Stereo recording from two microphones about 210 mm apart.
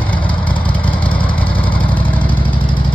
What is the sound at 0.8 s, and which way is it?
Vehicle, 25° left (ahead or behind).